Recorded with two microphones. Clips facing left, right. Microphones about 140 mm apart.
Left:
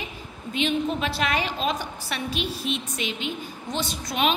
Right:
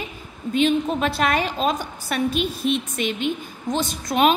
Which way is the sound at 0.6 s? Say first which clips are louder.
Right 5 dB; 45° right (ahead or behind).